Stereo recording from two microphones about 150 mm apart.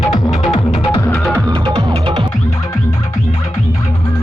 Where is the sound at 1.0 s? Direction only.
10° left (ahead or behind).